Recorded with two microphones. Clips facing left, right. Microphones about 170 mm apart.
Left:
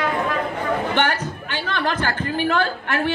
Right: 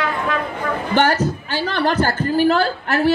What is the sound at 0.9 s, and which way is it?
A woman's voice, 40° right (ahead or behind).